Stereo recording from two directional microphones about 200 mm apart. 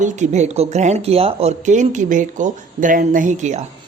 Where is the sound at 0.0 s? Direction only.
35° right (ahead or behind).